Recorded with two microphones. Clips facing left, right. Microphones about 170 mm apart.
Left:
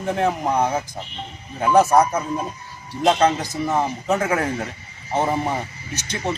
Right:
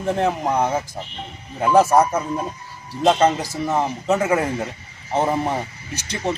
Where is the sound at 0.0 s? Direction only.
Centre (ahead or behind).